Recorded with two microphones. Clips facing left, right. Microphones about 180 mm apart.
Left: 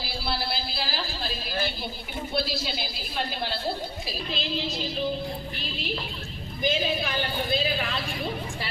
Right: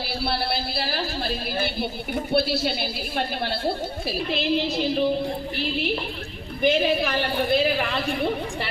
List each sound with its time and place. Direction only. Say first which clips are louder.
0.0 s a woman's voice: right 5 dB; 65° right (ahead or behind)